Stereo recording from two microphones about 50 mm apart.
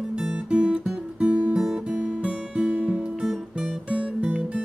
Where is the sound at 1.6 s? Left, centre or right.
Centre.